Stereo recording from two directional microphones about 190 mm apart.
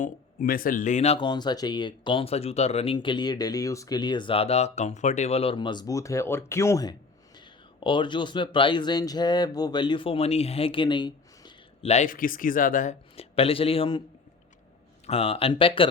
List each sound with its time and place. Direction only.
0.0 s speech: 45° left (ahead or behind); by 14.0 s 30° left (ahead or behind)
15.0 s speech: 30° left (ahead or behind)